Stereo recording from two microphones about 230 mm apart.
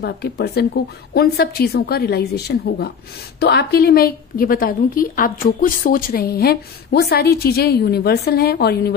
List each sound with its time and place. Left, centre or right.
0.0 s a woman's voice: left